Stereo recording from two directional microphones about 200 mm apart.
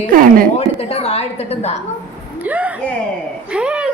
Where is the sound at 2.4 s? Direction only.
5° right (ahead or behind).